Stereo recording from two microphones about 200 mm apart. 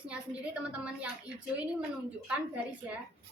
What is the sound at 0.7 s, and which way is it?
A woman's voice, 5° right (ahead or behind).